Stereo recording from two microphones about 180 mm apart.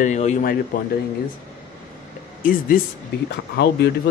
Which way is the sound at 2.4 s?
50° left (ahead or behind).